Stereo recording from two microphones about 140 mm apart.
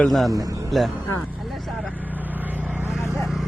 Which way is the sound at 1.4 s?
Centre (ahead or behind).